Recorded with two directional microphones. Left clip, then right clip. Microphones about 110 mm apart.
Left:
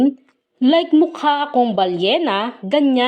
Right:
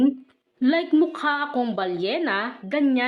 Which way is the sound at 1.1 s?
45° left (ahead or behind).